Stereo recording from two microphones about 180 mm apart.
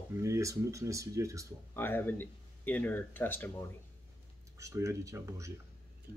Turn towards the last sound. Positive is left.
turn(degrees=-15)  # may be behind; listen again after turning